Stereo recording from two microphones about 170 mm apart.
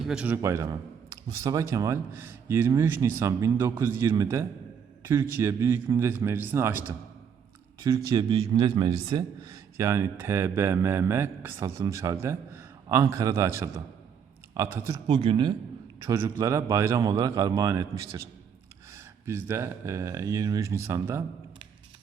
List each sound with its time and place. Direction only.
0.0 s a man's voice: 5° right (ahead or behind); by 15.5 s 30° right (ahead or behind)
16.0 s a man's voice: 15° right (ahead or behind)